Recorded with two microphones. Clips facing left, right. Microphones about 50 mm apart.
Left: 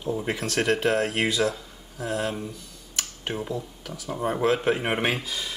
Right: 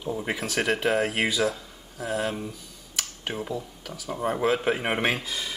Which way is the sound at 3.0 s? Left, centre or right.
Centre.